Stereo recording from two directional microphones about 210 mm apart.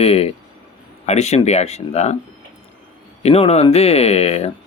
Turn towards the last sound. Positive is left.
turn(degrees=30)  # may be behind; listen again after turning